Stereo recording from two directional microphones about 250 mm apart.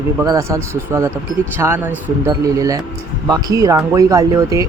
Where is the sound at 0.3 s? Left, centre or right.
Centre.